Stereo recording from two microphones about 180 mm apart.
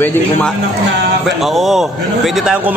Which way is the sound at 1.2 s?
Centre (ahead or behind).